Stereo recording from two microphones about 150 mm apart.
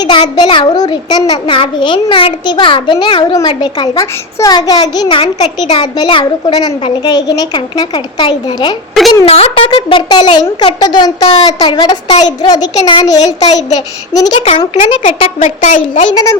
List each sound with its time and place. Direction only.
0.0 s a child's voice: 30° left (ahead or behind)
9.2 s a child's voice: 40° left (ahead or behind)
15.0 s a woman's voice: 50° left (ahead or behind)
16.0 s a child's voice: 25° left (ahead or behind)